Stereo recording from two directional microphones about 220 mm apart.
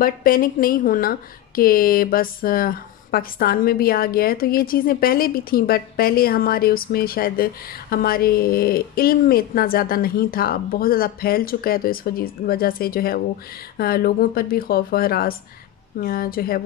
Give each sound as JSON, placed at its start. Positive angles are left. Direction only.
{"t": 0.0, "sound": "a woman's voice", "side_deg": 40}